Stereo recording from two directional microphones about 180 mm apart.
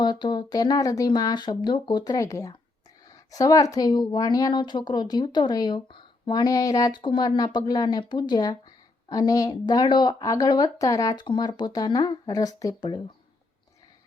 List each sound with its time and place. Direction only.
0.0 s speech: 25° left (ahead or behind)